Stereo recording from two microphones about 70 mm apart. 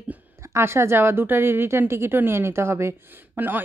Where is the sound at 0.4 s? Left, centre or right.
Right.